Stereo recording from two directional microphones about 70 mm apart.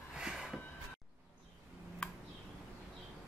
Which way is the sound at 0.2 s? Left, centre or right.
Centre.